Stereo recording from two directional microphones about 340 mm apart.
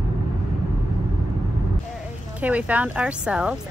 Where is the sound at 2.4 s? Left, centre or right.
Centre.